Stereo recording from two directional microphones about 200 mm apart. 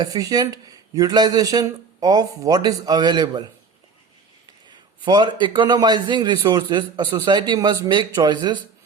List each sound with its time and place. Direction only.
0.0 s a man's voice: 20° right (ahead or behind)
5.0 s a man's voice: 20° right (ahead or behind)